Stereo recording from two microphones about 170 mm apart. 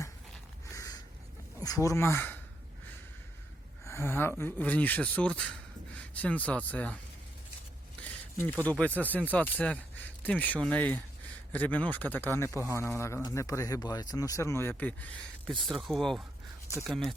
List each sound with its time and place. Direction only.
1.5 s speech: 20° left (ahead or behind)
3.8 s speech: 15° left (ahead or behind)
8.0 s a sound: 10° left (ahead or behind)
8.8 s a man's voice: 10° left (ahead or behind)